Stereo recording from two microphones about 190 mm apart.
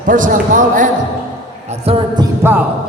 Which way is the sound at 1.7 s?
30° right (ahead or behind).